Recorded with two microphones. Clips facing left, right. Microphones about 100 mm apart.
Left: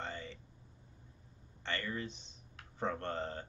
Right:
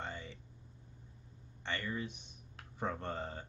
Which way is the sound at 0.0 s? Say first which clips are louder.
Left 1 dB; 15° right (ahead or behind).